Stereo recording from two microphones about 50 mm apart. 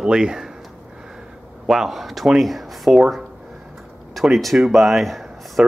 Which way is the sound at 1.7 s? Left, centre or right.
Centre.